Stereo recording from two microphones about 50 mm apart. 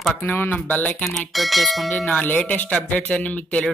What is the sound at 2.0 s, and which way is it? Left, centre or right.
A man's voice, left.